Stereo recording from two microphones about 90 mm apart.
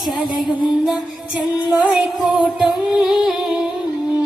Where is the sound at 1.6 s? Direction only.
15° right (ahead or behind).